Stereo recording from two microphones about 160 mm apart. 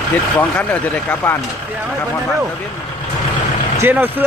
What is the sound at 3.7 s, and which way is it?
Speech, 15° right (ahead or behind).